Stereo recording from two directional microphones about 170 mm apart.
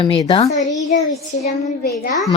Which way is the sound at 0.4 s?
45° left (ahead or behind).